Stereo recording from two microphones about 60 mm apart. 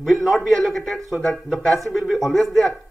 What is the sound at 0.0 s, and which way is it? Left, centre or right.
Speech, centre.